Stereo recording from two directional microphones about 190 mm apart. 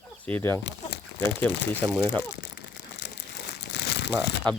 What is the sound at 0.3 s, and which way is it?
Speech, 10° left (ahead or behind).